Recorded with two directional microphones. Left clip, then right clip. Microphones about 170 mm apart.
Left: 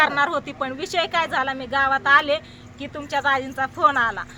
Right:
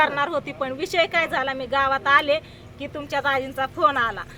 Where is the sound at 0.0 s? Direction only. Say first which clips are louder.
Left 2 dB; 30° left (ahead or behind).